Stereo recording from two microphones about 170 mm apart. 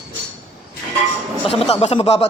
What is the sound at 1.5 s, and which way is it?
Speech, 35° left (ahead or behind).